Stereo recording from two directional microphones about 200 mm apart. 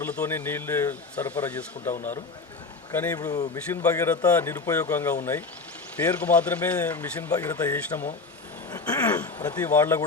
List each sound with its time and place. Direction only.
0.0 s a man's voice: 10° left (ahead or behind)
9.1 s a man's voice: 10° left (ahead or behind)